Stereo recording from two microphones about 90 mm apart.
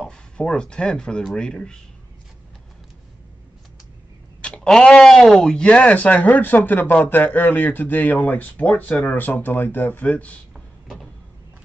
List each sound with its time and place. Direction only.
0.0 s speech: 10° left (ahead or behind)
4.4 s speech: 10° left (ahead or behind)
10.5 s a sound: centre (ahead or behind)